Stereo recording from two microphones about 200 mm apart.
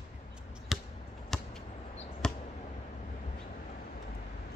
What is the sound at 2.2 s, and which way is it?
Basketball bounce, 5° left (ahead or behind).